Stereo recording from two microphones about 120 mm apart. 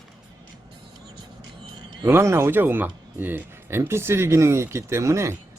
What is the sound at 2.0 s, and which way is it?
Speech, 20° right (ahead or behind).